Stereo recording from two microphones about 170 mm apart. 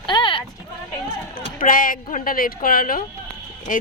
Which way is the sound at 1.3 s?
55° left (ahead or behind).